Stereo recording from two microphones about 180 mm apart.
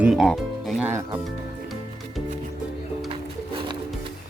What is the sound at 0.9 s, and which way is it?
Speech, 15° right (ahead or behind).